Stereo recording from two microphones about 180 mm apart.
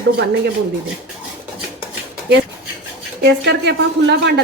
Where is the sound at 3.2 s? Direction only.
70° right (ahead or behind).